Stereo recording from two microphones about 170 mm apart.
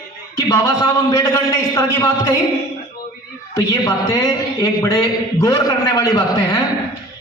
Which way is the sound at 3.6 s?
20° left (ahead or behind).